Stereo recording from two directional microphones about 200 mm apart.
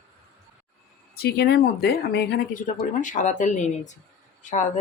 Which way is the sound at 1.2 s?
55° left (ahead or behind).